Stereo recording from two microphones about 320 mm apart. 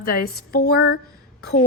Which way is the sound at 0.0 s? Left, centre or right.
Left.